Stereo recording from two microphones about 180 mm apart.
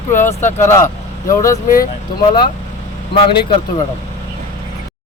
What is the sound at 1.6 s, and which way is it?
Speech, 50° left (ahead or behind).